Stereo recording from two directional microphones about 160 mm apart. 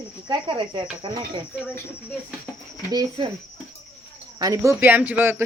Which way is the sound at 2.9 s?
25° right (ahead or behind).